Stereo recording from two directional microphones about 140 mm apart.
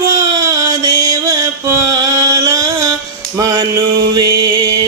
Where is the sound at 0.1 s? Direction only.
25° right (ahead or behind).